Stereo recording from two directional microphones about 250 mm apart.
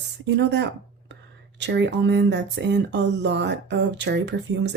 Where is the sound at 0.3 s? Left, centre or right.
Right.